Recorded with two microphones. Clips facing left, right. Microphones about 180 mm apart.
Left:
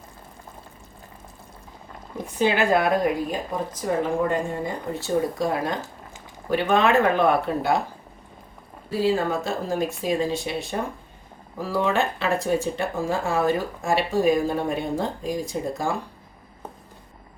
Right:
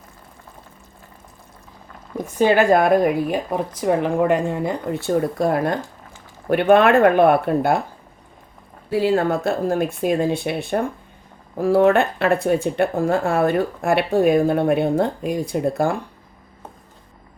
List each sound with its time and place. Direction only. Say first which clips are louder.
2.4 s speech: right 5 dB; 45° right (ahead or behind)
8.9 s speech: right 4 dB; 65° right (ahead or behind)